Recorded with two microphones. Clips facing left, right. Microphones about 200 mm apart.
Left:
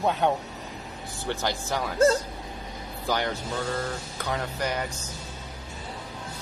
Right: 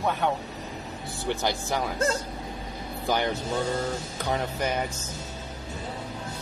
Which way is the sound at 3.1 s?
15° right (ahead or behind).